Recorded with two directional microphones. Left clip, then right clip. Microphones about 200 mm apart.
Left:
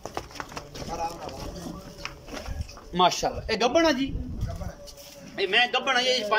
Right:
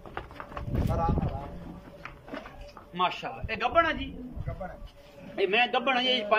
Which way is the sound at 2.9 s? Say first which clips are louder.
Left 7 dB; 30° left (ahead or behind).